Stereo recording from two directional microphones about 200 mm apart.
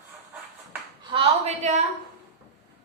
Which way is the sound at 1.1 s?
30° right (ahead or behind).